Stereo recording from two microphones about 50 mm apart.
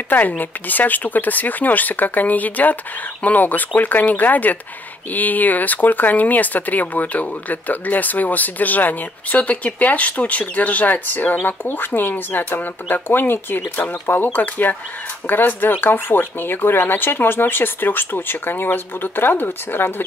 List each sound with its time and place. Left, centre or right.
0.4 s speech: left
13.6 s speech: left